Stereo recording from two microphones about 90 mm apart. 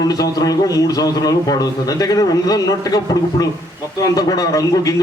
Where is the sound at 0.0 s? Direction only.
45° left (ahead or behind).